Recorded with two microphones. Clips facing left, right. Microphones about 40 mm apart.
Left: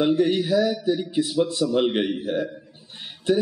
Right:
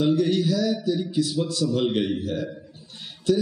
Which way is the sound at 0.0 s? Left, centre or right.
Left.